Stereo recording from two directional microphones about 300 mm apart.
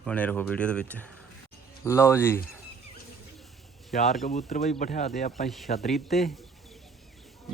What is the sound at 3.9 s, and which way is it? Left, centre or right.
Speech, left.